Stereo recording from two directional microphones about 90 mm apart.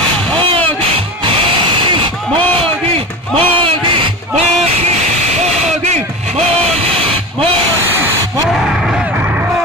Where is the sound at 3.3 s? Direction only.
85° right.